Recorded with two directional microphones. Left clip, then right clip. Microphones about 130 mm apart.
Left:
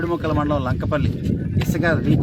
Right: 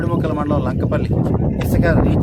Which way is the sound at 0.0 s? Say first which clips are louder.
Right 1 dB; 30° right (ahead or behind).